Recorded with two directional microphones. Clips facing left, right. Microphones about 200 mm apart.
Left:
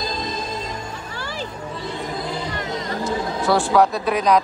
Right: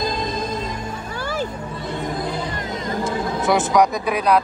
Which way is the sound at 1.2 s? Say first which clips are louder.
Right 6 dB; 50° right (ahead or behind).